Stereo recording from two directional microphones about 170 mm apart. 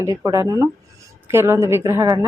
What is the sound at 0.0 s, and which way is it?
Speech, 15° right (ahead or behind).